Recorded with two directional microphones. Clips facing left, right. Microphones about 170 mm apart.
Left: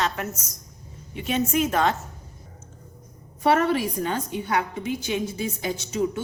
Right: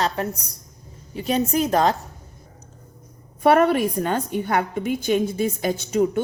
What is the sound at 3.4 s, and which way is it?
A woman's voice, 55° right (ahead or behind).